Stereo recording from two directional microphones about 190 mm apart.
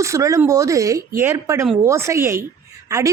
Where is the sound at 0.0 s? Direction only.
15° right (ahead or behind).